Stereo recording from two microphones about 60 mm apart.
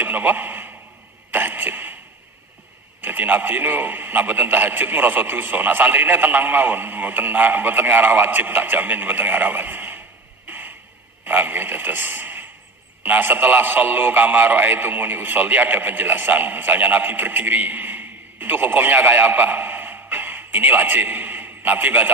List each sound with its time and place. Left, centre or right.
0.0 s a sound: right
1.3 s cough: right
3.0 s a man's voice: right
11.3 s a man's voice: right